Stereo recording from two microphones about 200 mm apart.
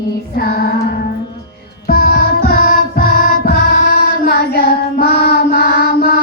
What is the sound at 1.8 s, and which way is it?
Music, 50° left (ahead or behind).